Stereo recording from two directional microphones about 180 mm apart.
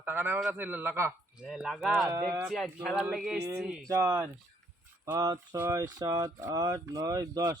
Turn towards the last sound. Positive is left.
turn(degrees=-20)  # may be behind; listen again after turning